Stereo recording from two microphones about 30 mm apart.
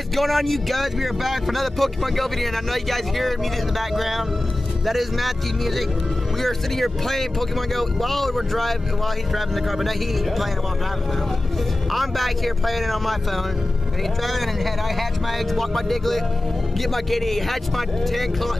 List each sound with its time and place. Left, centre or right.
0.1 s speech: centre
11.9 s speech: centre
14.2 s speech: centre